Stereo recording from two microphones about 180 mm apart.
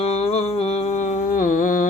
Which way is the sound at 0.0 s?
35° left (ahead or behind).